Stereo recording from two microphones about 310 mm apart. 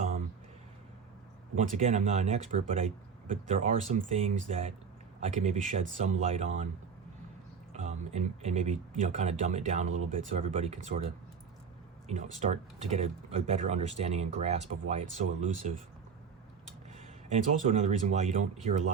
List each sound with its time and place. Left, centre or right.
1.5 s speech: right
7.7 s speech: right
12.0 s speech: right
17.5 s speech: right